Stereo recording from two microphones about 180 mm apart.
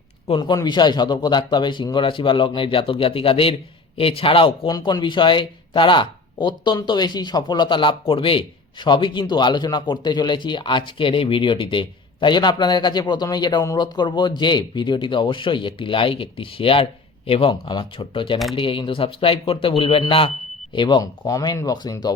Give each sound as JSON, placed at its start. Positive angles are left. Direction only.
{"t": 0.3, "sound": "speech", "side_deg": 25}